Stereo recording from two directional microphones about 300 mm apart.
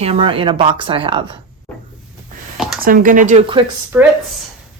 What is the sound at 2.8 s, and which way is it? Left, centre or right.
Speech, right.